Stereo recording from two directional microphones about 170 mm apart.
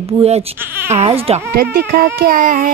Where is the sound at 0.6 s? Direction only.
15° right (ahead or behind).